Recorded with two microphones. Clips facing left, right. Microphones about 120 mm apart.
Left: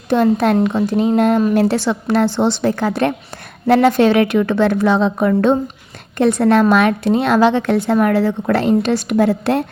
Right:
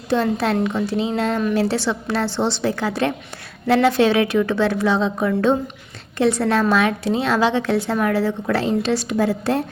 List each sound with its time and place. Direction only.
0.1 s a woman's voice: 50° left (ahead or behind)